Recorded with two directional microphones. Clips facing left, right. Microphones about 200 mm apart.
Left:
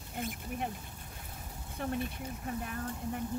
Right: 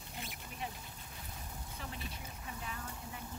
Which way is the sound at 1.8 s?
55° left (ahead or behind).